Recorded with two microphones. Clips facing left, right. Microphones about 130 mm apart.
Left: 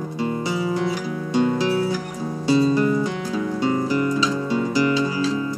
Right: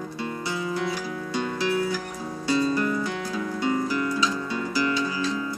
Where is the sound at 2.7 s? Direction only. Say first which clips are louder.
Left 6 dB; 20° left (ahead or behind).